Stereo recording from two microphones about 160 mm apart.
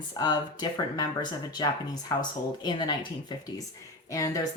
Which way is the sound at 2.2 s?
25° left (ahead or behind).